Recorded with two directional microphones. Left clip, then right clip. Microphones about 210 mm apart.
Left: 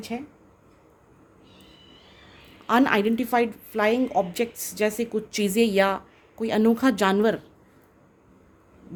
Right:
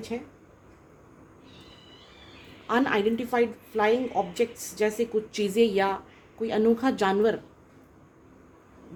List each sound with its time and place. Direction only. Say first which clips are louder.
0.1 s a woman's voice: left 1 dB; 60° left (ahead or behind)
2.6 s a woman's voice: left 3 dB; 55° left (ahead or behind)